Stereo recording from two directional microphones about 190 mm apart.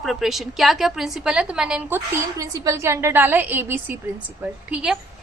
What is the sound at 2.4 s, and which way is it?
A woman's voice, 15° right (ahead or behind).